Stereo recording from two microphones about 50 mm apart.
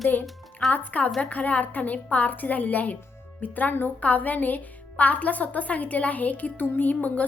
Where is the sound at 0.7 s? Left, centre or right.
Left.